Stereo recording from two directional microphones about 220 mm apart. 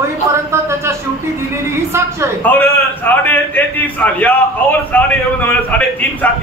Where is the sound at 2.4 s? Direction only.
10° left (ahead or behind).